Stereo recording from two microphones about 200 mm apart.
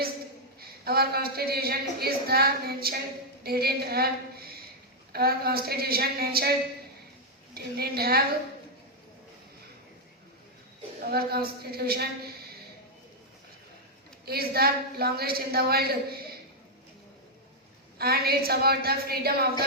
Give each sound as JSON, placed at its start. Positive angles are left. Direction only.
{"t": 0.6, "sound": "a woman's voice", "side_deg": -50}
{"t": 7.5, "sound": "a woman's voice", "side_deg": -50}
{"t": 11.0, "sound": "a woman's voice", "side_deg": -50}
{"t": 14.3, "sound": "a woman's voice", "side_deg": -50}
{"t": 17.9, "sound": "a woman's voice", "side_deg": -50}